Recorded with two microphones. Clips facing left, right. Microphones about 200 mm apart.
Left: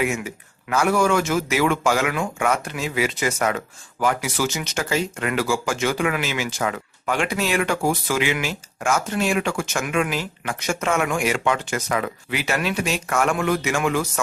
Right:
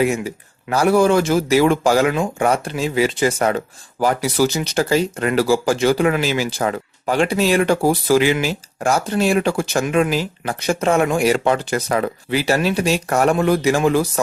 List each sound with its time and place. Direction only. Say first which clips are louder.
0.0 s speech: right 5 dB; 35° right (ahead or behind)